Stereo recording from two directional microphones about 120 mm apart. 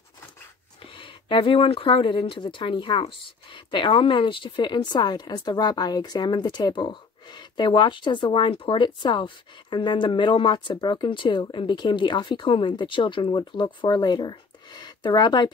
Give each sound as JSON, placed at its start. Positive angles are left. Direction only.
{"t": 0.9, "sound": "speech", "side_deg": 45}